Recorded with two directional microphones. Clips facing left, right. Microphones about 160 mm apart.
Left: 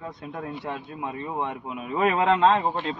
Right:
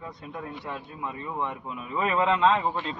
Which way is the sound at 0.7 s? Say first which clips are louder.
Left 3 dB; 50° left (ahead or behind).